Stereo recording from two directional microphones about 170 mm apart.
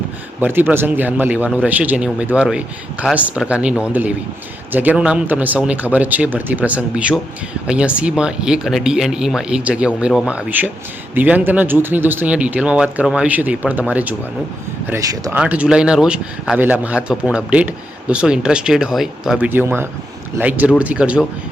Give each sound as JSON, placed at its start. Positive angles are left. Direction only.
{"t": 0.3, "sound": "a man's voice", "side_deg": -10}
{"t": 15.4, "sound": "a man's voice", "side_deg": -5}